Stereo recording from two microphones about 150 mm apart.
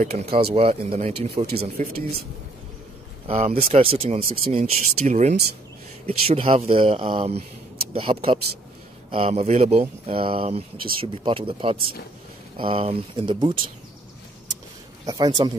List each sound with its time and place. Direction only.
0.0 s speech: 45° right (ahead or behind)
3.3 s speech: 45° right (ahead or behind)
15.0 s speech: 25° right (ahead or behind)